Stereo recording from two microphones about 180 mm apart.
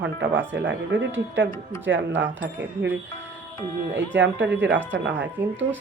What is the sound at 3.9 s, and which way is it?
Speech, 85° right.